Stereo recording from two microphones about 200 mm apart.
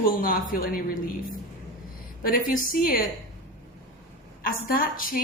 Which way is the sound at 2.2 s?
45° left (ahead or behind).